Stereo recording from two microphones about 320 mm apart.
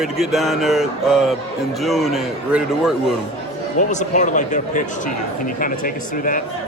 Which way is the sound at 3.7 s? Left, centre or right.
Left.